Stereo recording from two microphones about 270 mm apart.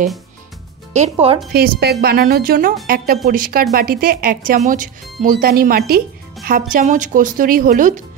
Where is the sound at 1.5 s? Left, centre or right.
Right.